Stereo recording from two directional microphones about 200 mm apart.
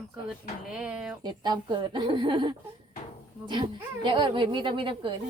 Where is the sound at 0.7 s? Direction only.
5° right (ahead or behind).